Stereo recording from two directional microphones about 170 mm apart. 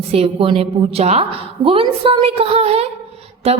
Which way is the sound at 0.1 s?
35° right (ahead or behind).